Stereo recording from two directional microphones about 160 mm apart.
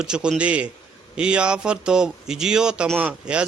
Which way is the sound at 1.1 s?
5° right (ahead or behind).